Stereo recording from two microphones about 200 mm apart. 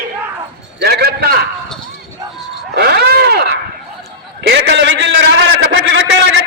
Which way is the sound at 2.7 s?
55° right (ahead or behind).